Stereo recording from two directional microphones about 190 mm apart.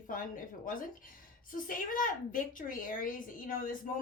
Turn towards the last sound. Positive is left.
turn(degrees=45)  # may be behind; listen again after turning